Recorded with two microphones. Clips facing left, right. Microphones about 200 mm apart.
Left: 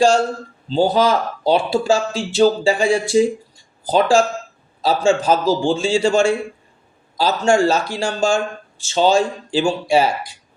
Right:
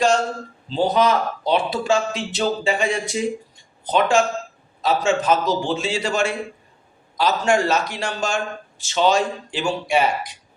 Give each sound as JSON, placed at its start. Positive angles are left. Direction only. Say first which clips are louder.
{"t": 0.0, "sound": "a man's voice", "louder": "left 4 dB", "side_deg": 30}